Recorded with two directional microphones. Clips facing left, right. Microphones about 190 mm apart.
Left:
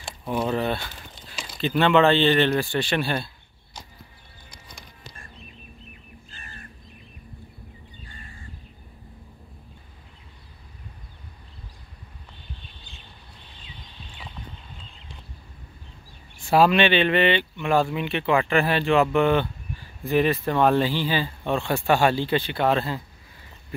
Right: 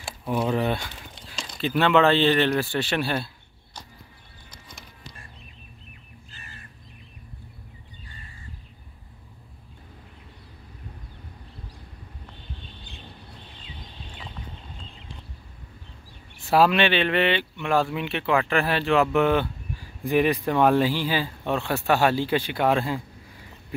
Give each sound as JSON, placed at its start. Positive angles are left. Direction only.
{"t": 0.0, "sound": "speech", "side_deg": -5}
{"t": 1.3, "sound": "a sound", "side_deg": 5}
{"t": 1.6, "sound": "speech", "side_deg": -5}
{"t": 16.4, "sound": "speech", "side_deg": 0}